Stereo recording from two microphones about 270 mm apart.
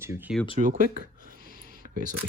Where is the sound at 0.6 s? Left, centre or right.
Right.